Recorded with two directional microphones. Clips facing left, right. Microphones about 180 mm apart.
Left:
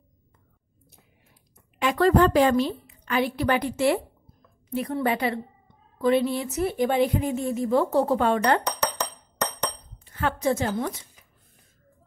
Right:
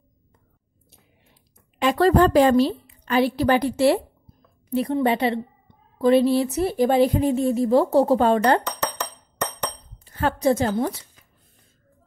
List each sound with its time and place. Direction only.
1.8 s a woman's voice: 35° right (ahead or behind)
8.6 s chink: centre (ahead or behind)
10.0 s a woman's voice: 35° right (ahead or behind)